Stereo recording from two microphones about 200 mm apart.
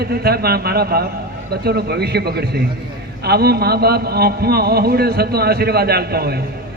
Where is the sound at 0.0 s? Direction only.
50° right (ahead or behind).